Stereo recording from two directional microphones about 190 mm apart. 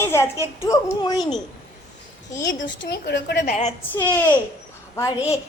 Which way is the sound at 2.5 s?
70° left (ahead or behind).